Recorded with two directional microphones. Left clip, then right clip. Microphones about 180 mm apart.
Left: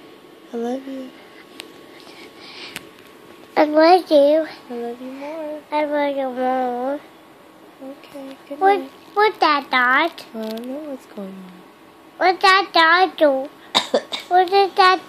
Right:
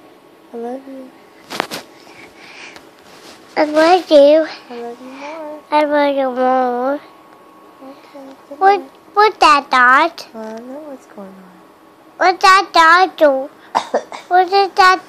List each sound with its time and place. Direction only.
3.5 s a child's voice: 10° right (ahead or behind)
8.5 s a child's voice: 10° right (ahead or behind)
12.2 s a child's voice: 10° right (ahead or behind)